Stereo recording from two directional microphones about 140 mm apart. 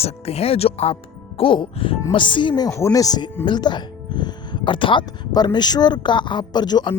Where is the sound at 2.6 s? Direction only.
20° left (ahead or behind).